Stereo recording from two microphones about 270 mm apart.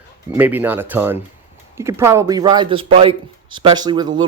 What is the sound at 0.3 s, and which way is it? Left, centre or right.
Speech, centre.